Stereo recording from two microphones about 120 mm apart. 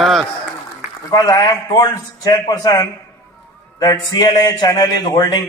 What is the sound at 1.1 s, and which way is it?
A man's voice, 35° left (ahead or behind).